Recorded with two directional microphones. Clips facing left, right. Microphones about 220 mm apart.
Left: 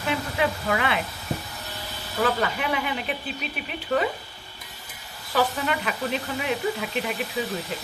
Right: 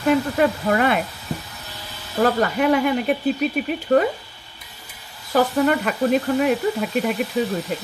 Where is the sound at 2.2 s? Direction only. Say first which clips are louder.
Right 7 dB; 45° right (ahead or behind).